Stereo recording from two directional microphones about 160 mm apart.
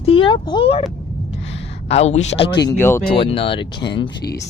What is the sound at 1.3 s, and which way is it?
Gasp, 40° left (ahead or behind).